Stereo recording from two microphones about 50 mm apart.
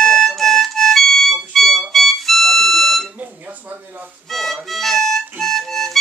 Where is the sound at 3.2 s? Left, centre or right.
Right.